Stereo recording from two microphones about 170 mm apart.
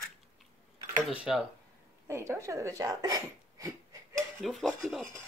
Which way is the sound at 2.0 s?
15° right (ahead or behind).